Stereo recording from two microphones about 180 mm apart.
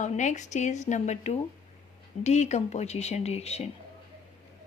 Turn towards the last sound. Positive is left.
turn(degrees=35)  # may be behind; listen again after turning